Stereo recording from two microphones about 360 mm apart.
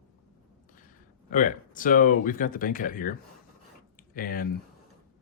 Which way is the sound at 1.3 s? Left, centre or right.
Left.